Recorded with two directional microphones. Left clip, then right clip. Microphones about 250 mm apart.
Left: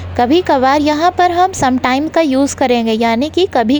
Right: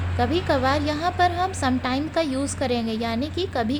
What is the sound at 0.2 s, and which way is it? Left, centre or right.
A woman's voice, left.